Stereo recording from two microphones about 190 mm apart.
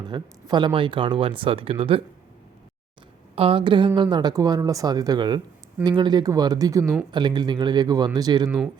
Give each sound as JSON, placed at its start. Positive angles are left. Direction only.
{"t": 0.1, "sound": "speech", "side_deg": -25}
{"t": 3.3, "sound": "speech", "side_deg": -30}
{"t": 8.4, "sound": "speech", "side_deg": -5}